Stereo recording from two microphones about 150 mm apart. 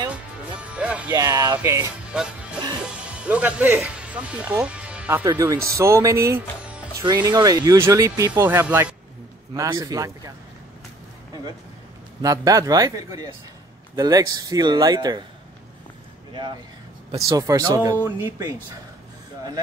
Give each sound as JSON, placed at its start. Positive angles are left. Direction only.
{"t": 0.6, "sound": "music", "side_deg": -10}
{"t": 1.1, "sound": "speech", "side_deg": -20}
{"t": 2.1, "sound": "speech", "side_deg": -5}
{"t": 5.2, "sound": "speech", "side_deg": -25}
{"t": 9.5, "sound": "speech", "side_deg": -25}
{"t": 12.2, "sound": "speech", "side_deg": -25}
{"t": 17.3, "sound": "speech", "side_deg": -20}
{"t": 18.0, "sound": "speech", "side_deg": -15}